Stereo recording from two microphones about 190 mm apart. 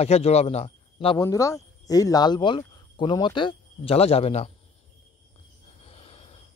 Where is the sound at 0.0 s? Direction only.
35° left (ahead or behind).